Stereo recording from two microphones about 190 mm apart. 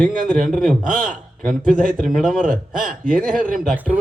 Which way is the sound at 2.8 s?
45° right (ahead or behind).